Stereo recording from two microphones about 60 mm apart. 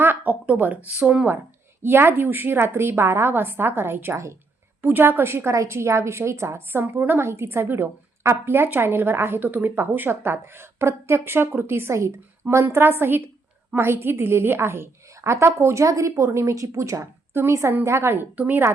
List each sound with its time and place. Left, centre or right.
0.0 s speech: right
1.8 s a woman's voice: right
4.1 s a woman's voice: right
4.8 s a woman's voice: right
17.3 s a woman's voice: right